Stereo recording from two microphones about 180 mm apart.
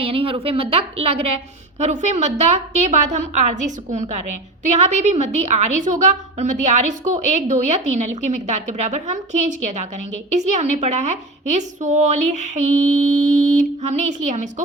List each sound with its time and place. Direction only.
0.0 s a woman's voice: 30° right (ahead or behind)